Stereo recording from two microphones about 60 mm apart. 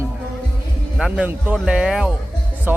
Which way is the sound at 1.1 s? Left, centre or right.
Right.